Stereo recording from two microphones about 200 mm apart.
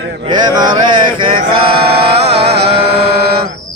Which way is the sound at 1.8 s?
50° right (ahead or behind).